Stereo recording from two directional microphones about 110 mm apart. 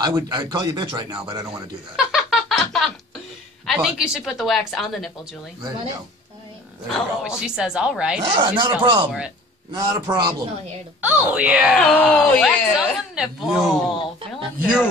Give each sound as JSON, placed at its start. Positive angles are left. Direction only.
{"t": 0.0, "sound": "speech", "side_deg": -40}
{"t": 2.0, "sound": "a sound", "side_deg": 0}
{"t": 3.6, "sound": "speech", "side_deg": -5}
{"t": 6.9, "sound": "speech", "side_deg": -5}
{"t": 8.3, "sound": "speech", "side_deg": -45}
{"t": 9.7, "sound": "speech", "side_deg": -35}
{"t": 11.0, "sound": "speech", "side_deg": -10}